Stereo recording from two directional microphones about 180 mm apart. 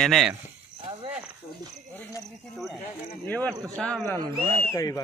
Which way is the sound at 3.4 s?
20° right (ahead or behind).